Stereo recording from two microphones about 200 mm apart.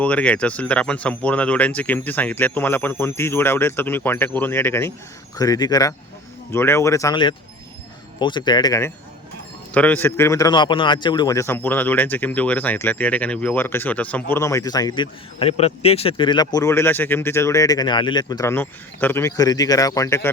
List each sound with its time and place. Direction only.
0.0 s a man's voice: 5° left (ahead or behind)
9.7 s a man's voice: 5° left (ahead or behind)